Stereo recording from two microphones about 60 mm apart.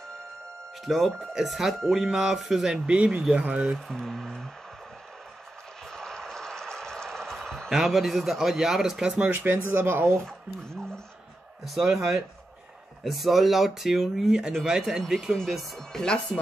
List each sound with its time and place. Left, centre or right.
0.8 s speech: centre
3.7 s speech: centre
5.9 s vehicle: centre
7.7 s speech: centre
9.3 s speech: right
11.6 s speech: centre
15.9 s speech: centre